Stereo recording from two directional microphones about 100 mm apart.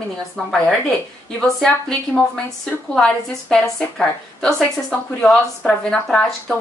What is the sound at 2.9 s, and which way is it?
A woman's voice, 5° left (ahead or behind).